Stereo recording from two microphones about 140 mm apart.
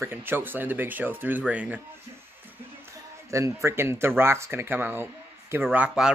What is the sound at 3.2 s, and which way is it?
Speech, 20° right (ahead or behind).